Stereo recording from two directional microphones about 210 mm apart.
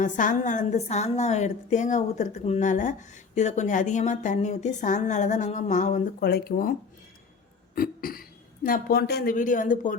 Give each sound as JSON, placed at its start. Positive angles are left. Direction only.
{"t": 0.0, "sound": "a woman's voice", "side_deg": 35}
{"t": 7.8, "sound": "speech", "side_deg": 45}